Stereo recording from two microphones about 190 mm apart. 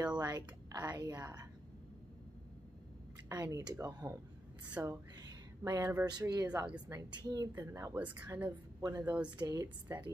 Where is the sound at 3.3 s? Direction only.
20° right (ahead or behind).